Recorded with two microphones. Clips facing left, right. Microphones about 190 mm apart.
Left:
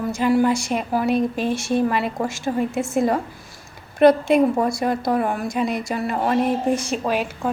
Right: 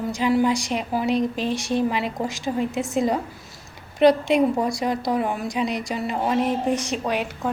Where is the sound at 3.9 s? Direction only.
50° left (ahead or behind).